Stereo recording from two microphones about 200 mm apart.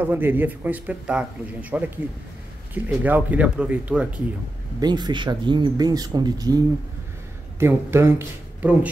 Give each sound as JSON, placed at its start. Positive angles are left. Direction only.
{"t": 0.0, "sound": "speech", "side_deg": -10}
{"t": 4.7, "sound": "speech", "side_deg": -20}